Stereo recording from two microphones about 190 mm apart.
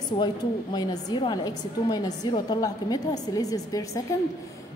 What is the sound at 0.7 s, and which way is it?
A woman's voice, 20° left (ahead or behind).